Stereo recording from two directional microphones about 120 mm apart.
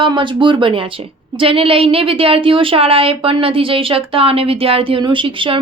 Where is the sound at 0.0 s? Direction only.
45° right (ahead or behind).